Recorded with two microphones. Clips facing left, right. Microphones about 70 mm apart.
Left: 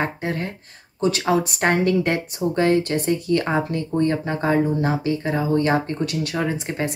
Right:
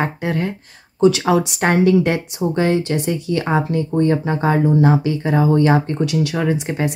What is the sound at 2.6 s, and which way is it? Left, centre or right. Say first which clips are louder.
Speech: left 1 dB; left.